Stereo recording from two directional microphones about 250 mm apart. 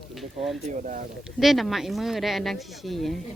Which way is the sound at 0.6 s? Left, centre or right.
Right.